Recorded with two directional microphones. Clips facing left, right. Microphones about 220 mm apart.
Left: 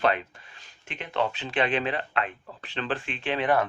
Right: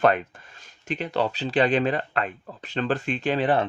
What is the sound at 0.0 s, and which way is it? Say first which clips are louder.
Speech: right 5 dB; 50° right (ahead or behind).